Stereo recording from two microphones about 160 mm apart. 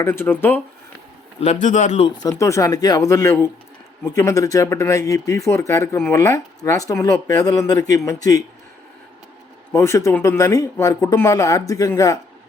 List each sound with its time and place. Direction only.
0.0 s speech: 15° left (ahead or behind)
1.4 s a man's voice: 50° left (ahead or behind)
2.4 s speech: 20° left (ahead or behind)
9.7 s speech: 15° left (ahead or behind)